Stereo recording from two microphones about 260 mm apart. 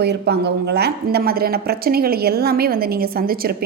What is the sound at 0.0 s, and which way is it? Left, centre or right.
Speech, right.